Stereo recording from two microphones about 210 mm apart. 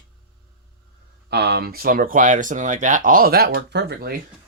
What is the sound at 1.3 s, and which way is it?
Speech, 50° right (ahead or behind).